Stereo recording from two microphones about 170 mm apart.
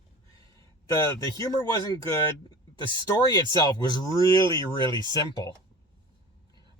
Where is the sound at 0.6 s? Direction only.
20° left (ahead or behind).